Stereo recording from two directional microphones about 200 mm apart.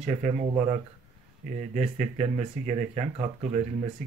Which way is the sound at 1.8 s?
35° right (ahead or behind).